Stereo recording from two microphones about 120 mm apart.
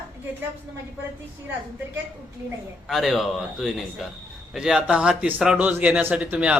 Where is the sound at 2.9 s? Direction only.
Centre (ahead or behind).